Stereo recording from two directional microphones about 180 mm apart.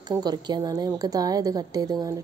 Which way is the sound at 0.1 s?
20° right (ahead or behind).